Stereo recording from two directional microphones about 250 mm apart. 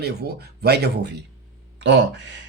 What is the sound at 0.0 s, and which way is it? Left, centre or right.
Speech, right.